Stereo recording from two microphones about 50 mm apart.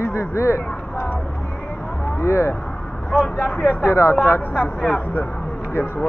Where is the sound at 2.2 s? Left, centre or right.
Left.